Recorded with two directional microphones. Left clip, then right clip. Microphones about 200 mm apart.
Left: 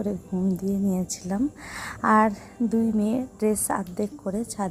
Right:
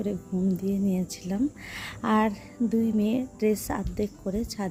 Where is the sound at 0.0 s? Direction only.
Centre (ahead or behind).